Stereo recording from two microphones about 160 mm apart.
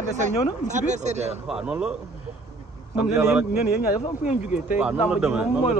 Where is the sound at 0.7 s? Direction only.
50° right (ahead or behind).